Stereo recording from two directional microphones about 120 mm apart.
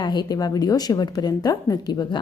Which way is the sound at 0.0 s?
35° left (ahead or behind).